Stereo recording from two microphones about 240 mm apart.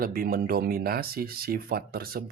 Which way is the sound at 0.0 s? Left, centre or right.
Right.